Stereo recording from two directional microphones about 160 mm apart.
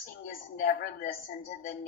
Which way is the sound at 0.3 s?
60° left (ahead or behind).